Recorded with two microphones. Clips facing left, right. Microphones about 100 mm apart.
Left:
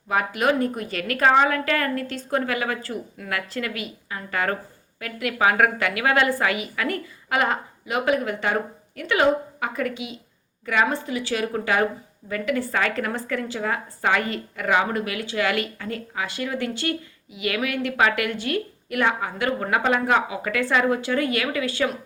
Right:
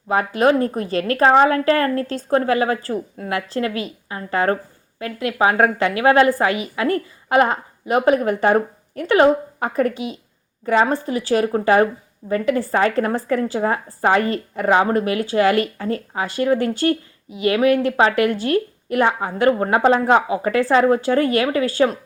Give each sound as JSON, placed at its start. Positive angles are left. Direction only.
{"t": 0.1, "sound": "a woman's voice", "side_deg": -30}